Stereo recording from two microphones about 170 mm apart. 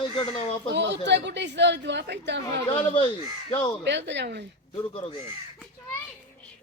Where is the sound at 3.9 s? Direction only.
90° right.